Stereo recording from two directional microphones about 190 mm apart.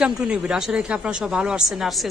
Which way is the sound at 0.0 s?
5° right (ahead or behind).